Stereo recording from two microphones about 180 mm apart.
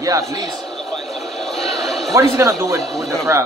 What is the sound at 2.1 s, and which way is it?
Speech, 15° right (ahead or behind).